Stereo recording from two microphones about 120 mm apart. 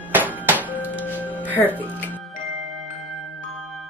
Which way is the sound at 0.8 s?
15° left (ahead or behind).